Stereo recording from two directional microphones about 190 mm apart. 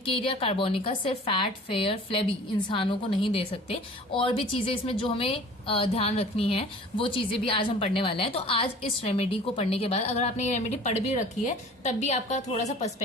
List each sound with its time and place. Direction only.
0.0 s a woman's voice: 30° left (ahead or behind)